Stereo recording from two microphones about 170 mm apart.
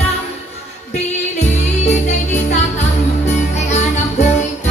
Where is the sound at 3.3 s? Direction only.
40° left (ahead or behind).